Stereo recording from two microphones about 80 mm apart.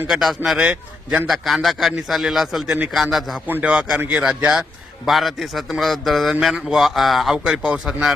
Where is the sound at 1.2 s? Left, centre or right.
Centre.